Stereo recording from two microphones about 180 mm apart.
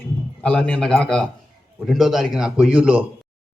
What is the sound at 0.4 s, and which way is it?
A man's voice, 5° left (ahead or behind).